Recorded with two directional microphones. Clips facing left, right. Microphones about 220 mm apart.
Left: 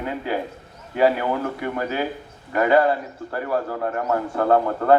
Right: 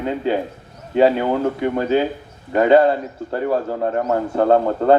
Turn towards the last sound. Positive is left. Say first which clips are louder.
# right 3 dB
turn(degrees=-25)  # may be behind; listen again after turning